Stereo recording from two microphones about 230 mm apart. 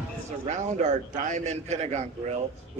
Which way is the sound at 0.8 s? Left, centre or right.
Right.